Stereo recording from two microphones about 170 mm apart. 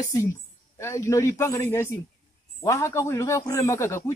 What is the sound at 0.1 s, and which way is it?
Speech, 20° left (ahead or behind).